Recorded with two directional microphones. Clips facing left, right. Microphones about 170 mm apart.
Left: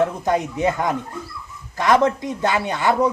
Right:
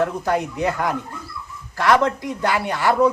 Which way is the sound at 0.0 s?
20° left (ahead or behind).